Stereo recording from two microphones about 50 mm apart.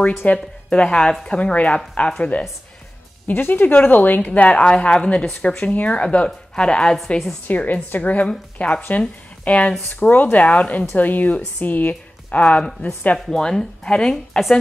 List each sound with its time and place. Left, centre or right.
0.2 s a woman's voice: left
3.3 s a woman's voice: left; by 7.0 s centre
7.4 s a woman's voice: left
13.2 s speech: centre